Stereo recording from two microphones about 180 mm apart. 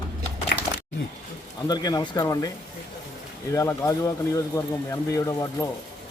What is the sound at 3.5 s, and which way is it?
Speech, 15° left (ahead or behind).